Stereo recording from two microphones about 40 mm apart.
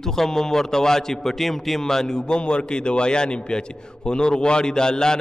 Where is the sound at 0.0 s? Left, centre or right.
Centre.